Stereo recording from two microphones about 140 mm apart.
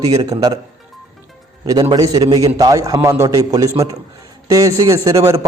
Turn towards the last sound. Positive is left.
turn(degrees=-25)  # may be behind; listen again after turning